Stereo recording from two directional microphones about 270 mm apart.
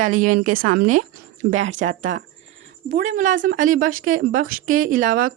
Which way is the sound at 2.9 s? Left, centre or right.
Right.